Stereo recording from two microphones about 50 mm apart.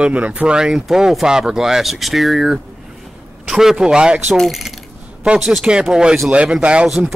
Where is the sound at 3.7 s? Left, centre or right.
Centre.